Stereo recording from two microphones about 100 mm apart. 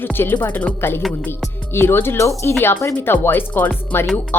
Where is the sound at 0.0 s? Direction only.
20° left (ahead or behind).